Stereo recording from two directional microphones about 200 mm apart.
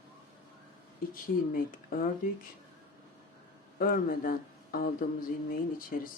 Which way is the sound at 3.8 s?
45° left (ahead or behind).